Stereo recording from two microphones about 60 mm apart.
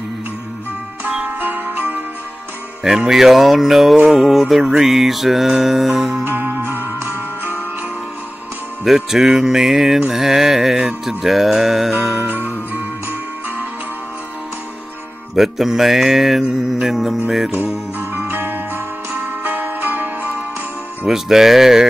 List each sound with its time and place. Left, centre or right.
1.4 s music: right
2.8 s music: centre
6.2 s music: right
8.8 s music: centre
12.2 s music: right
15.3 s music: centre
18.3 s jingle bell: right
19.4 s music: right
21.1 s music: centre